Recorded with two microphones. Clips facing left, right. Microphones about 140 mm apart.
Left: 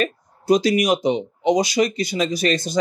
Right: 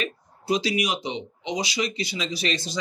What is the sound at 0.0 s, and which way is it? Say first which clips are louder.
Speech: left 8 dB; 45° left (ahead or behind).